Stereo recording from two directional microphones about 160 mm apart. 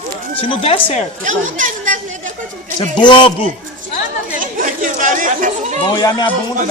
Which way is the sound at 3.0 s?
30° left (ahead or behind).